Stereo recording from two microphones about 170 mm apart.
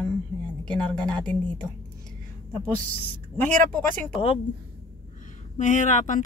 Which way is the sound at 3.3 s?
10° left (ahead or behind).